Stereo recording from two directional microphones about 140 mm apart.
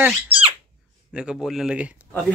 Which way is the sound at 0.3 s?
40° right (ahead or behind).